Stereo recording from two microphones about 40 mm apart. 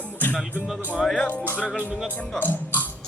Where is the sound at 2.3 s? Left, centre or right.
Left.